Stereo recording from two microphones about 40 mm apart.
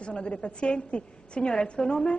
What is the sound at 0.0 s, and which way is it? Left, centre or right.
A woman's voice, left.